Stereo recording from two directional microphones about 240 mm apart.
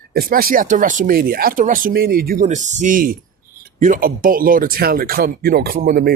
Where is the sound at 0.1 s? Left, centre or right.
Right.